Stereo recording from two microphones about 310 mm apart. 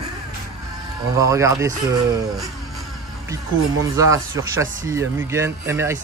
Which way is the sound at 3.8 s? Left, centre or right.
Centre.